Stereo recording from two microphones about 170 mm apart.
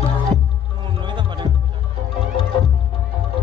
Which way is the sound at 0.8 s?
30° right (ahead or behind).